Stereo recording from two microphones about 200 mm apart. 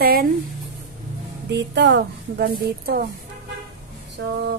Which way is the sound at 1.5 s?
60° right (ahead or behind).